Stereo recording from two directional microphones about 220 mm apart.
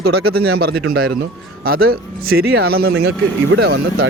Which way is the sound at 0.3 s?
45° right (ahead or behind).